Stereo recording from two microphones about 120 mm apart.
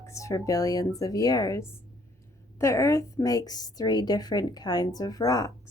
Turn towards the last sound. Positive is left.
turn(degrees=30)  # may be behind; listen again after turning